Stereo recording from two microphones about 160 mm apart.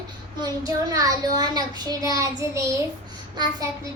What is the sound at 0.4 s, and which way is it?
A child's voice, 25° right (ahead or behind).